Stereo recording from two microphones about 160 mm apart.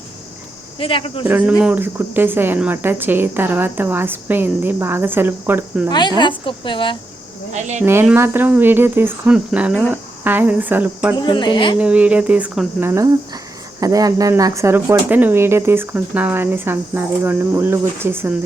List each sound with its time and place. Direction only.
0.8 s speech: 35° left (ahead or behind)
1.2 s speech: 10° right (ahead or behind)
5.9 s a woman's voice: 25° left (ahead or behind)
7.5 s speech: 45° right (ahead or behind)
8.0 s speech: 15° right (ahead or behind)
11.2 s a woman's voice: 30° left (ahead or behind)
11.8 s speech: 10° right (ahead or behind)